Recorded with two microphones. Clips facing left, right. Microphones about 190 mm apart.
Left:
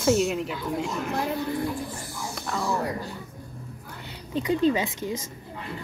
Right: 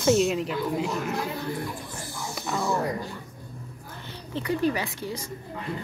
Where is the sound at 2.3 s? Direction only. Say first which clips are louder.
Right 1 dB; 5° right (ahead or behind).